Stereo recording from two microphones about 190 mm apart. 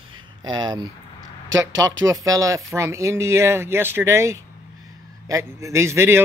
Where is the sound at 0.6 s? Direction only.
20° right (ahead or behind).